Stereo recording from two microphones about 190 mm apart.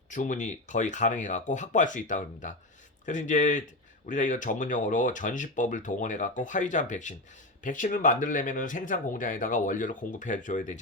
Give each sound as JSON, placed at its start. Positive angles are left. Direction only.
{"t": 0.1, "sound": "speech", "side_deg": 40}